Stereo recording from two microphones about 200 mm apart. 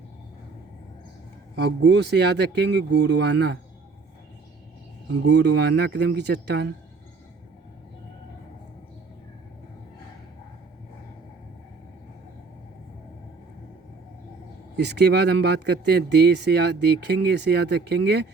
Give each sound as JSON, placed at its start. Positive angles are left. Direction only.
{"t": 1.5, "sound": "speech", "side_deg": -60}
{"t": 5.2, "sound": "speech", "side_deg": -60}
{"t": 14.8, "sound": "speech", "side_deg": -55}